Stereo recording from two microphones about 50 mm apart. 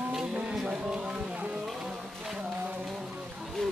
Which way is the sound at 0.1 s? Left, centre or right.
Centre.